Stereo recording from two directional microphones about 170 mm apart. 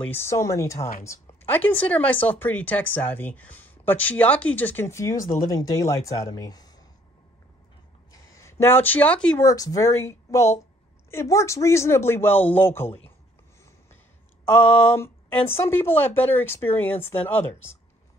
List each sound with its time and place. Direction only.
0.1 s speech: 15° left (ahead or behind)
0.7 s speech: 50° left (ahead or behind)
1.0 s speech: 10° left (ahead or behind)
5.1 s speech: 50° left (ahead or behind)
5.5 s speech: 20° left (ahead or behind)
8.1 s a sound: 15° left (ahead or behind)
9.4 s speech: 20° left (ahead or behind)
14.6 s a sound: 35° left (ahead or behind)
15.4 s speech: 15° left (ahead or behind)